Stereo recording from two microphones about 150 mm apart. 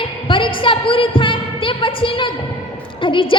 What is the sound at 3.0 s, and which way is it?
Speech, 35° left (ahead or behind).